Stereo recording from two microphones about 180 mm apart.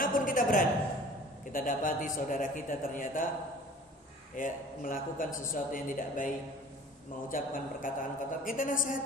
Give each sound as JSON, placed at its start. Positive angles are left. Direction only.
{"t": 0.0, "sound": "a sound", "side_deg": 50}
{"t": 1.5, "sound": "a man's voice", "side_deg": 50}
{"t": 4.4, "sound": "a man's voice", "side_deg": 50}